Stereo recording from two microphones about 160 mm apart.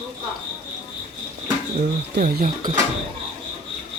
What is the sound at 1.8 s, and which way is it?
Speech, 70° right (ahead or behind).